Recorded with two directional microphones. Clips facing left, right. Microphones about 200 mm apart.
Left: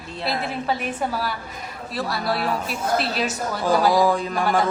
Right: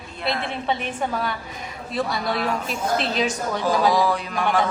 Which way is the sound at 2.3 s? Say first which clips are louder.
Left 3 dB; 35° left (ahead or behind).